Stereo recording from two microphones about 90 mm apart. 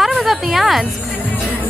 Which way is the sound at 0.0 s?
Centre (ahead or behind).